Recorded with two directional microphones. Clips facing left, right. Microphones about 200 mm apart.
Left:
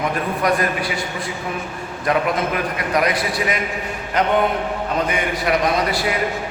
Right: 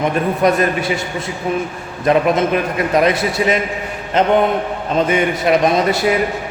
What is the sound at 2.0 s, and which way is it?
A man's voice, 25° right (ahead or behind).